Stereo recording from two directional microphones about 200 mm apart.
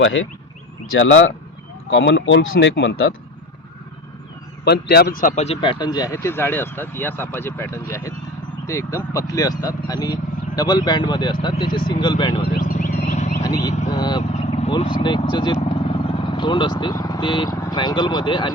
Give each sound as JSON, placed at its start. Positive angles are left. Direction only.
{"t": 0.9, "sound": "speech", "side_deg": 70}
{"t": 4.6, "sound": "a man's voice", "side_deg": 55}
{"t": 12.5, "sound": "a sound", "side_deg": 40}
{"t": 13.4, "sound": "vehicle", "side_deg": 20}
{"t": 14.4, "sound": "vehicle", "side_deg": 35}
{"t": 14.7, "sound": "speech", "side_deg": 25}